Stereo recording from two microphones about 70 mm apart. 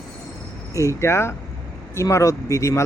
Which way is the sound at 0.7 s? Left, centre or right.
Left.